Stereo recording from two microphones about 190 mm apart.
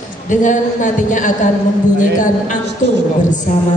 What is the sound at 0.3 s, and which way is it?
Speech, 40° left (ahead or behind).